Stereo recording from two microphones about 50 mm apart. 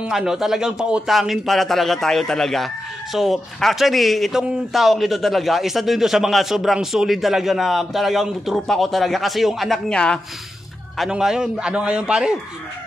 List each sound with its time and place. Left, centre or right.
0.1 s a man's voice: centre
1.0 s a man's voice: centre
9.8 s speech: centre
11.1 s a man's voice: centre
11.7 s a man's voice: right